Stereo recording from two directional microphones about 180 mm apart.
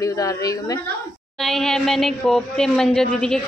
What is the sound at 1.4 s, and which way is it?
Speech, centre (ahead or behind).